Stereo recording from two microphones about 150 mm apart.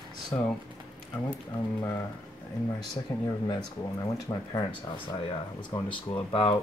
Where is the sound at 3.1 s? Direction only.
20° left (ahead or behind).